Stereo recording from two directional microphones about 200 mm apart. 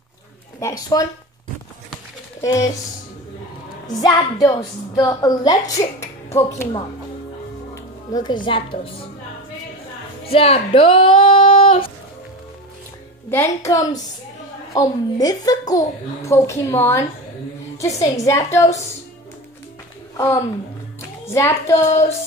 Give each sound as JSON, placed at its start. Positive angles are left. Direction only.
{"t": 0.6, "sound": "a woman's voice", "side_deg": 15}
{"t": 2.4, "sound": "a woman's voice", "side_deg": 15}
{"t": 4.0, "sound": "a woman's voice", "side_deg": 20}
{"t": 8.1, "sound": "a woman's voice", "side_deg": 20}
{"t": 10.2, "sound": "speech", "side_deg": 30}
{"t": 13.3, "sound": "a woman's voice", "side_deg": 15}
{"t": 21.3, "sound": "a woman's voice", "side_deg": 15}